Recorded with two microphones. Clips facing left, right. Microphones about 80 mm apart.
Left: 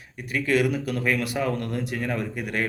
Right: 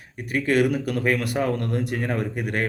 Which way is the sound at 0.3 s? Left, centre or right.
Right.